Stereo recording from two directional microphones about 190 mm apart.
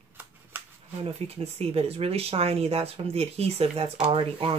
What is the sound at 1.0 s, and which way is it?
Speech, 35° right (ahead or behind).